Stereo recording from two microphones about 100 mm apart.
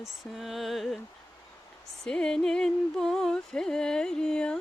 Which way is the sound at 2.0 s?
5° left (ahead or behind).